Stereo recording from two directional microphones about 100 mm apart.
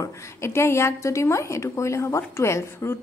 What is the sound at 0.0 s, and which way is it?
A woman's voice, 25° left (ahead or behind).